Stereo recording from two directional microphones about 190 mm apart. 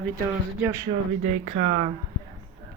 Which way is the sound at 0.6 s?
15° right (ahead or behind).